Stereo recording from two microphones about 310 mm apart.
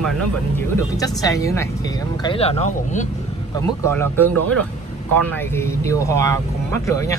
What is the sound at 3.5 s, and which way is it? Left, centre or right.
Speech, centre.